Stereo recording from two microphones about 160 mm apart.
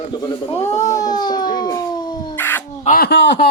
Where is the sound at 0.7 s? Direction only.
20° left (ahead or behind).